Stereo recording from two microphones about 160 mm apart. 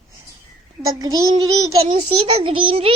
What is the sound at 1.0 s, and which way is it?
Speech, 25° right (ahead or behind).